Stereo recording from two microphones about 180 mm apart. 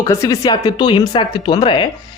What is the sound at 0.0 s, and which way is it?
A man's voice, 20° left (ahead or behind).